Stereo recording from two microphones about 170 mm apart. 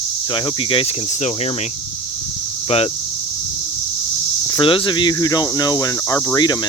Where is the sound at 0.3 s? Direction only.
30° left (ahead or behind).